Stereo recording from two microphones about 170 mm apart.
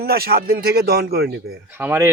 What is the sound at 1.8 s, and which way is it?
Speech, 10° right (ahead or behind).